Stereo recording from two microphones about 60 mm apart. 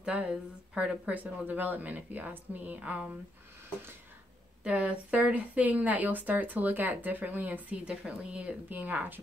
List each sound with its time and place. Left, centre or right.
0.0 s speech: centre
4.6 s speech: centre